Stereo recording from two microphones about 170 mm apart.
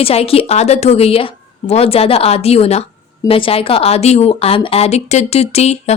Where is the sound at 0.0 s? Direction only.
35° left (ahead or behind).